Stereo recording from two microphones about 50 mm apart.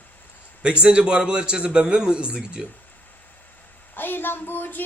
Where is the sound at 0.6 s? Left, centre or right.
Right.